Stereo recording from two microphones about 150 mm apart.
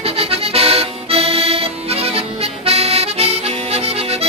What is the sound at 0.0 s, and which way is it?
Accordion, 40° right (ahead or behind).